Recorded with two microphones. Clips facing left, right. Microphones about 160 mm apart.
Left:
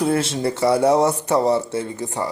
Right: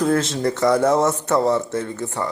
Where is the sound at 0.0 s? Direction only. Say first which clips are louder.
Right 1 dB; 10° left (ahead or behind).